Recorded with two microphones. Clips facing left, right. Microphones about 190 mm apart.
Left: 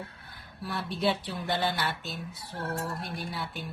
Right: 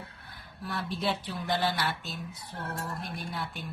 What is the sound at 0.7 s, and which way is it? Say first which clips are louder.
A woman's voice: left 3 dB; centre (ahead or behind).